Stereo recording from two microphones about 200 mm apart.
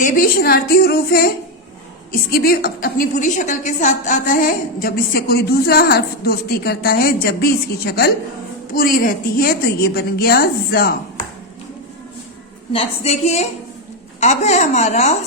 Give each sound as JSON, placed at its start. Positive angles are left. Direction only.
{"t": 0.0, "sound": "a woman's voice", "side_deg": 45}
{"t": 2.3, "sound": "a woman's voice", "side_deg": 50}
{"t": 12.7, "sound": "a woman's voice", "side_deg": 30}